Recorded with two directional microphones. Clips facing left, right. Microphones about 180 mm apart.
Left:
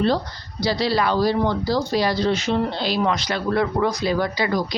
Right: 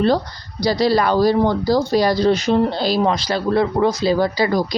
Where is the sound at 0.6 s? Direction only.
40° right (ahead or behind).